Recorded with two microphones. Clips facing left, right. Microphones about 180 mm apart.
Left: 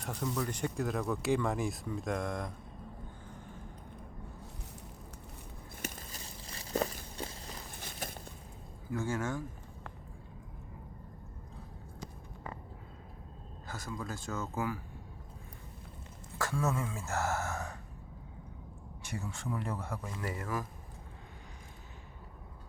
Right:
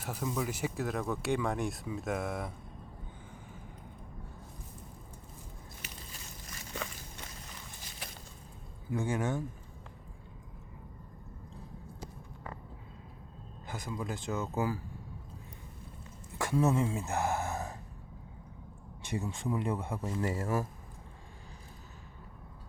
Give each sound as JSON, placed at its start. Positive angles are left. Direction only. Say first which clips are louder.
{"t": 0.0, "sound": "speech", "louder": "right 1 dB", "side_deg": -5}
{"t": 5.8, "sound": "walk", "louder": "left 8 dB", "side_deg": 40}
{"t": 8.9, "sound": "speech", "louder": "right 2 dB", "side_deg": -20}
{"t": 13.7, "sound": "speech", "louder": "right 3 dB", "side_deg": -20}
{"t": 16.4, "sound": "speech", "louder": "right 5 dB", "side_deg": -20}
{"t": 19.0, "sound": "speech", "louder": "right 5 dB", "side_deg": -20}